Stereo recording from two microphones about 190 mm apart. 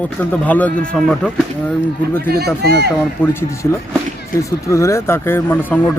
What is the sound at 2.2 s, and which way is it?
Speech, 55° right (ahead or behind).